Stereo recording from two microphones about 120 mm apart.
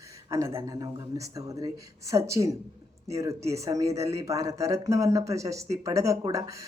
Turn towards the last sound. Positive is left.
turn(degrees=-25)  # may be behind; listen again after turning